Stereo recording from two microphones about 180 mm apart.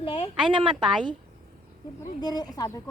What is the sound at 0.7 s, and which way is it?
Speech, 5° right (ahead or behind).